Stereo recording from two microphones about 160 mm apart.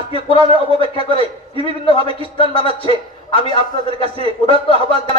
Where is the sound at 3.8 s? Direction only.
35° right (ahead or behind).